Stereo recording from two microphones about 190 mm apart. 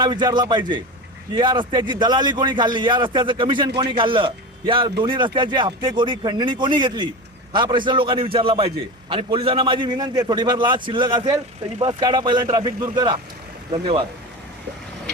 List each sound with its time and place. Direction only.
0.0 s a man's voice: 25° right (ahead or behind)